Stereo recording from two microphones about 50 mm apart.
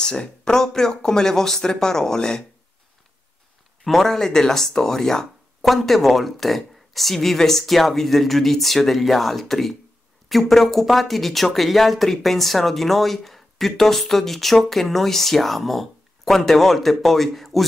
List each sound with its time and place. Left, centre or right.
0.0 s speech: centre
3.8 s speech: centre